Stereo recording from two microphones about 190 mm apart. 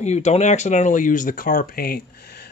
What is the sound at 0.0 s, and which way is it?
Speech, 35° left (ahead or behind).